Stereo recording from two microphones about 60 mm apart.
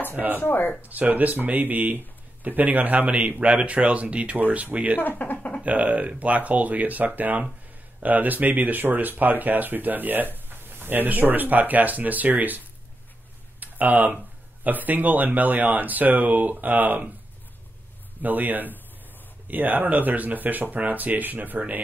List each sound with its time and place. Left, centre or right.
0.1 s speech: right
0.4 s speech: left
0.8 s speech: right
5.0 s speech: left
5.6 s speech: right
18.2 s speech: right